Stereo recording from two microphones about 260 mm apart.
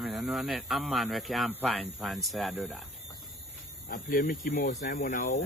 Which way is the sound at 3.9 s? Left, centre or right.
Left.